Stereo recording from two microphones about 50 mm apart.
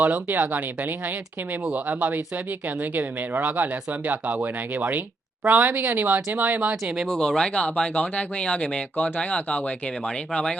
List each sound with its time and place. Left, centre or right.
0.0 s speech: right
7.1 s speech: centre